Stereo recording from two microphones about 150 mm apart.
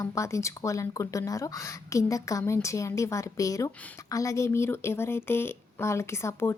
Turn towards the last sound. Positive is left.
turn(degrees=20)  # may be behind; listen again after turning